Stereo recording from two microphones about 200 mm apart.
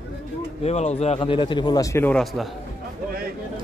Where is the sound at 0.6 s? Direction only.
35° left (ahead or behind); by 2.5 s centre (ahead or behind).